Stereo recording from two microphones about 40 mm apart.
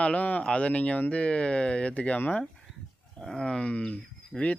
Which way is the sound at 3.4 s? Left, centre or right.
Left.